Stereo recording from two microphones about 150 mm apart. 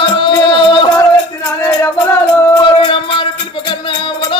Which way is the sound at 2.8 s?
35° left (ahead or behind).